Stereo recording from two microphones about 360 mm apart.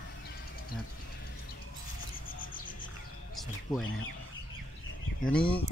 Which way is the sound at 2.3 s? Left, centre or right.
Left.